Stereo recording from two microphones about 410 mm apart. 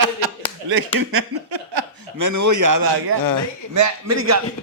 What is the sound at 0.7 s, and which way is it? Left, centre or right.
Speech, right.